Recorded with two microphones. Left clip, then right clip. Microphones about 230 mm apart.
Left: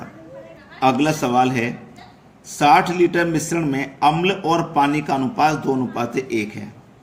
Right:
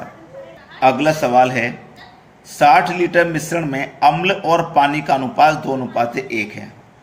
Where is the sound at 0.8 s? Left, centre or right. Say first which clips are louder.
Right 4 dB; left.